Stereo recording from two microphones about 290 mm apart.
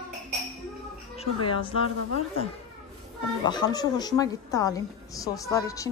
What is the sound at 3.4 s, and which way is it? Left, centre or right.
A woman's voice, centre.